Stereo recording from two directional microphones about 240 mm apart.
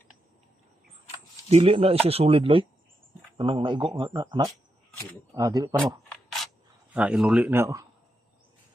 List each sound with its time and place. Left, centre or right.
1.5 s speech: right
5.8 s rub: centre
6.9 s speech: centre